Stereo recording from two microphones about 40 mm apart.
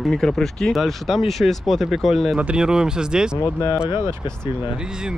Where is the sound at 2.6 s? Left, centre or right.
Centre.